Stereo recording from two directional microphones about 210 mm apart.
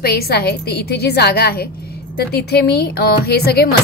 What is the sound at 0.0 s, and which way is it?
A woman's voice, 45° left (ahead or behind).